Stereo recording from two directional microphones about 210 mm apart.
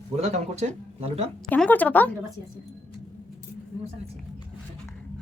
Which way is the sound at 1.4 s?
5° left (ahead or behind).